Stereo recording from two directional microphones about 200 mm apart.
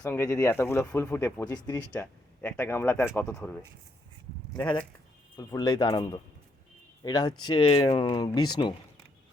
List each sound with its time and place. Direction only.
0.0 s speech: 15° left (ahead or behind)
4.5 s speech: 15° left (ahead or behind)